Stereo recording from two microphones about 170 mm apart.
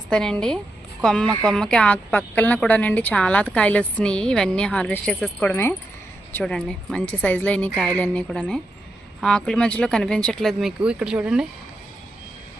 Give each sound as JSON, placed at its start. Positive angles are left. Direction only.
{"t": 0.1, "sound": "a woman's voice", "side_deg": 5}